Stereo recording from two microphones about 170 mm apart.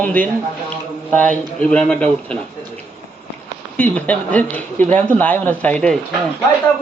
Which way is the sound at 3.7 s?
10° left (ahead or behind).